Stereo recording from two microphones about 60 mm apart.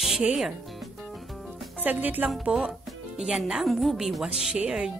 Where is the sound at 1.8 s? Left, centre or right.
Right.